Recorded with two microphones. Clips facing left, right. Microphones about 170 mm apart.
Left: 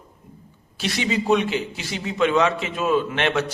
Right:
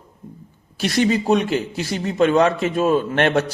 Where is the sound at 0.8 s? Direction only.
45° right (ahead or behind).